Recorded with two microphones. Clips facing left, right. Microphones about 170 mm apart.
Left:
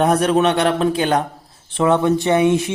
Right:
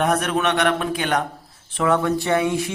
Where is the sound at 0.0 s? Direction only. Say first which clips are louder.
Left 5 dB; 30° left (ahead or behind).